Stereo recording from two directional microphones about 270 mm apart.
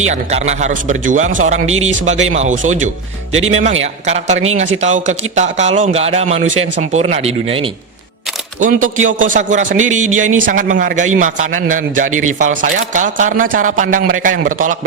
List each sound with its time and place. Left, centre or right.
0.1 s a man's voice: right